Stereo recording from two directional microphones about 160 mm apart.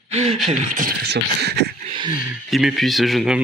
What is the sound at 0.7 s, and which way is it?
Speech, 75° right (ahead or behind).